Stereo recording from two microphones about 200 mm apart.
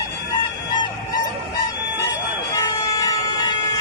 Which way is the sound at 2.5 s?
20° left (ahead or behind).